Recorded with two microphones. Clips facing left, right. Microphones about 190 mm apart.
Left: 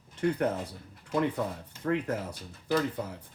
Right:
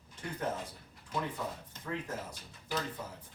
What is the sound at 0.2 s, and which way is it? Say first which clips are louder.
Speech: left 14 dB; 65° left (ahead or behind).